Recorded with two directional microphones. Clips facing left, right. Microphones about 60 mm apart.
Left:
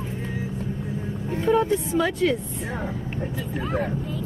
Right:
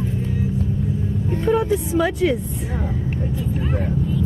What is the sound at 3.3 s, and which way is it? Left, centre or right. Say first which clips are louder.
Speech: right 3 dB; left.